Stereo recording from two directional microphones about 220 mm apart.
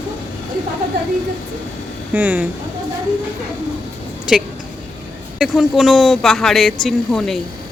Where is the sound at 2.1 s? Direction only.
10° right (ahead or behind).